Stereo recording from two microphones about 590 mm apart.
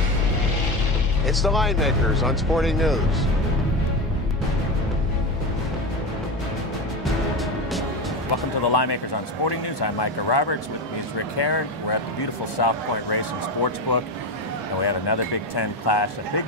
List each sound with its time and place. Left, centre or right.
1.2 s speech: centre
8.7 s speech: left